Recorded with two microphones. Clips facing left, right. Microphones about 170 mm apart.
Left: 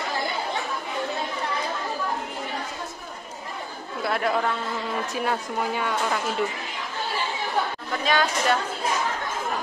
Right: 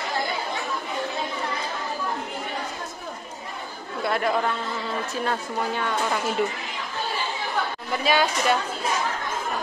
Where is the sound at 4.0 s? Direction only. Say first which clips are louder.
Right 1 dB; centre (ahead or behind).